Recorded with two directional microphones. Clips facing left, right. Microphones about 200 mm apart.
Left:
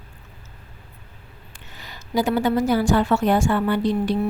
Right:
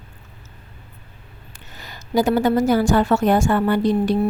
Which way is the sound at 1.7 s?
45° right (ahead or behind).